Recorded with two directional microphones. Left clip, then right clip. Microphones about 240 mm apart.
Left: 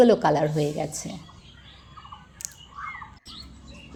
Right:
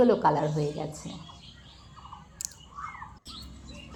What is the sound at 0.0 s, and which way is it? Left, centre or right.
Speech, left.